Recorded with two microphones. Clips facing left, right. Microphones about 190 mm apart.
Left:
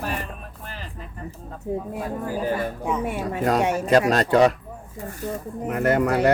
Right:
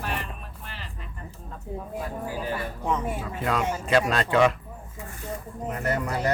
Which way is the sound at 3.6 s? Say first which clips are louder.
Left 6 dB; 70° left (ahead or behind).